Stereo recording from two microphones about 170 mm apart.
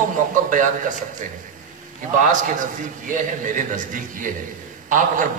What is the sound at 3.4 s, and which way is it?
A man's voice, 50° right (ahead or behind).